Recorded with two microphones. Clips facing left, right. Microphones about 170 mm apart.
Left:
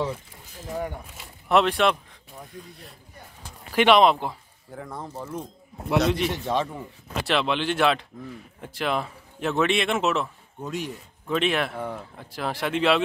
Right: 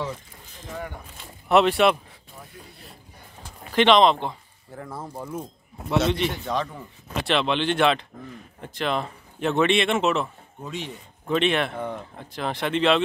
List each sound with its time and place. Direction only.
0.0 s a sound: 10° left (ahead or behind)
1.0 s speech: centre (ahead or behind)
5.9 s speech: centre (ahead or behind)
6.4 s a man's voice: 25° left (ahead or behind)
7.2 s speech: 5° left (ahead or behind)